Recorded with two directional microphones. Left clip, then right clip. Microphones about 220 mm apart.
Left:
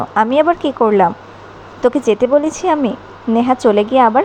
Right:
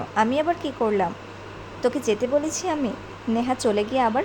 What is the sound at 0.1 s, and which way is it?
A woman's voice, 20° left (ahead or behind).